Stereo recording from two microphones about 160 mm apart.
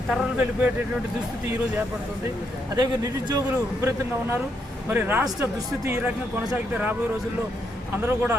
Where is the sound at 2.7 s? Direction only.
25° right (ahead or behind).